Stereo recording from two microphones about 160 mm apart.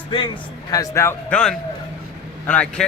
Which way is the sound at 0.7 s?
20° left (ahead or behind).